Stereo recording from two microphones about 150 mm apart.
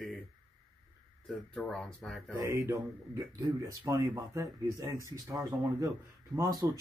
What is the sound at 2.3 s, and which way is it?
Speech, 20° right (ahead or behind).